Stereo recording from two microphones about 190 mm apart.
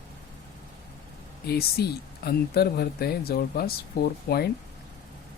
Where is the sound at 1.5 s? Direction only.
55° left (ahead or behind).